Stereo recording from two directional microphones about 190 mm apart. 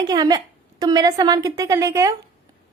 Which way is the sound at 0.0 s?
20° right (ahead or behind).